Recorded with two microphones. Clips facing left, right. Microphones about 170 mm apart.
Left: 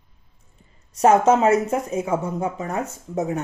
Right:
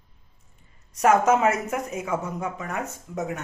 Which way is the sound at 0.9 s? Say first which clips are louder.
Left 3 dB; 30° left (ahead or behind).